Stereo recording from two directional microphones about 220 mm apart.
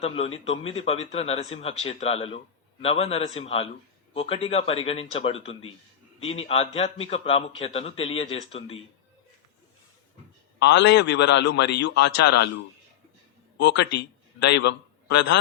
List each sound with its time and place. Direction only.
0.0 s a man's voice: 25° left (ahead or behind)
10.6 s a man's voice: 55° left (ahead or behind)
13.6 s a man's voice: 55° left (ahead or behind)